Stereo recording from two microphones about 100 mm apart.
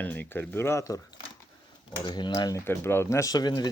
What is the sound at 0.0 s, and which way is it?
Speech, 15° left (ahead or behind).